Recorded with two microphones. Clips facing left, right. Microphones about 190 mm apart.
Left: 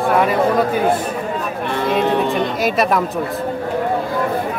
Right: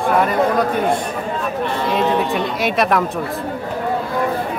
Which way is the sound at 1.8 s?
55° left (ahead or behind).